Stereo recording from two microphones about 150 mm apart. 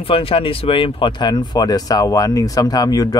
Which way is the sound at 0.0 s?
40° left (ahead or behind).